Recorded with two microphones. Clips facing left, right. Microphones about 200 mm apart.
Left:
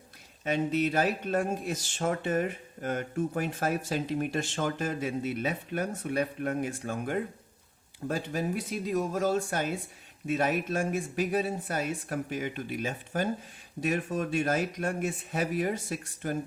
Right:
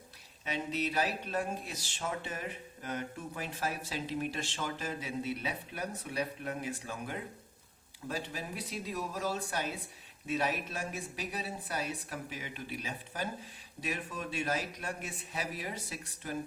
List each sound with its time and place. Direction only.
0.4 s speech: 50° left (ahead or behind)